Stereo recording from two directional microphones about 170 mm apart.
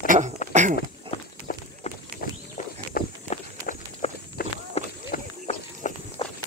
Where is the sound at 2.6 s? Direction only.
45° left (ahead or behind).